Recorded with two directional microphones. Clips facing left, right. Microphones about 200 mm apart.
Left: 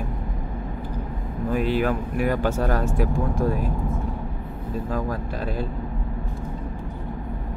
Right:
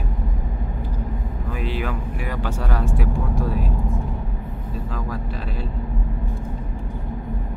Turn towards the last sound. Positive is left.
turn(degrees=45)  # may be behind; listen again after turning